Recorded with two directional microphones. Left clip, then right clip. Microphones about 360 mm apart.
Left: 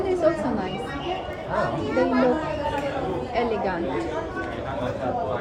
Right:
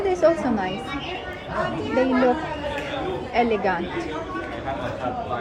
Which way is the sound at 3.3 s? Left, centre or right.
Right.